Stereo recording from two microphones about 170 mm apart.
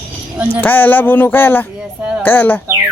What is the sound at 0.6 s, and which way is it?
Speech, 10° left (ahead or behind).